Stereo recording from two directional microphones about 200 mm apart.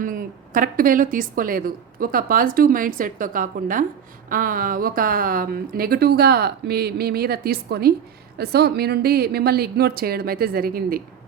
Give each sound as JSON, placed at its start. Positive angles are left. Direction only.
{"t": 0.0, "sound": "a woman's voice", "side_deg": -45}